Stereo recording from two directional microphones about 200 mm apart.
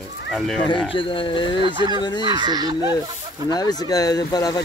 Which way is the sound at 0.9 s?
25° left (ahead or behind).